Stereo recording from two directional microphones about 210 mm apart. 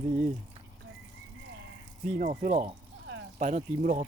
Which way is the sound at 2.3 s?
35° right (ahead or behind).